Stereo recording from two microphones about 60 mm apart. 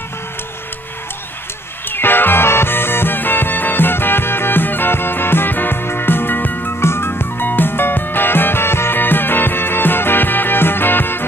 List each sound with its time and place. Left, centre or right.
1.9 s music: left